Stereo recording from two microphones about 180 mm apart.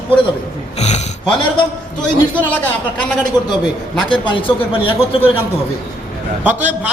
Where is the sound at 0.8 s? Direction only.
40° left (ahead or behind).